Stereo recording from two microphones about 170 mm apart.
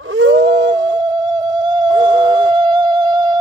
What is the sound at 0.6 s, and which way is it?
Music, 25° right (ahead or behind).